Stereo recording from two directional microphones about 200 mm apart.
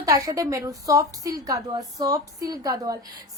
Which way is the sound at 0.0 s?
15° right (ahead or behind).